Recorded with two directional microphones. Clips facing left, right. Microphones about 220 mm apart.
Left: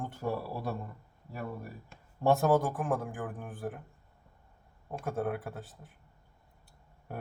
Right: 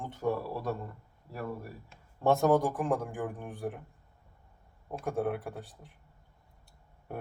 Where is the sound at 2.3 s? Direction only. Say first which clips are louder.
Right 1 dB; 5° left (ahead or behind).